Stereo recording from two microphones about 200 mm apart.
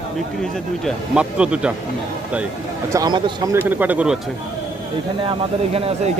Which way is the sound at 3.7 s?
10° right (ahead or behind).